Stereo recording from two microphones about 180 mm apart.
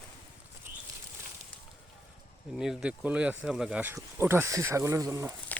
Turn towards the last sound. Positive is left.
turn(degrees=-15)  # may be behind; listen again after turning